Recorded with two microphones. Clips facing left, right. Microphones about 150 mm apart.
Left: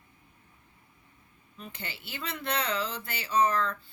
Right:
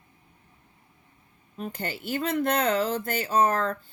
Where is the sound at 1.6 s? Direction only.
45° right (ahead or behind).